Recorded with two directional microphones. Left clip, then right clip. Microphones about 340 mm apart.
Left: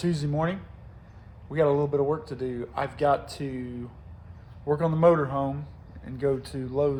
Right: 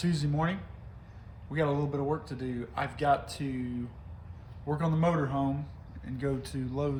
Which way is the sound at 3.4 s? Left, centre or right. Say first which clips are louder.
Left 2 dB; centre.